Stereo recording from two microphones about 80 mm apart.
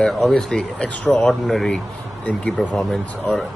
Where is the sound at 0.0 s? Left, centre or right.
Centre.